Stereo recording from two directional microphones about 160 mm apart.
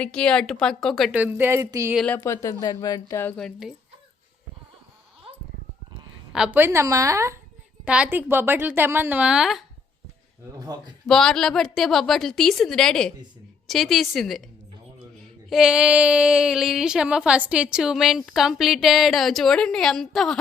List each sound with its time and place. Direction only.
0.0 s speech: 5° left (ahead or behind)
1.2 s a woman's voice: 10° right (ahead or behind)
2.0 s speech: 10° left (ahead or behind)
3.3 s speech: centre (ahead or behind)
6.3 s a woman's voice: 5° right (ahead or behind)
10.6 s speech: 25° right (ahead or behind)
11.0 s speech: centre (ahead or behind)
15.4 s speech: 5° right (ahead or behind)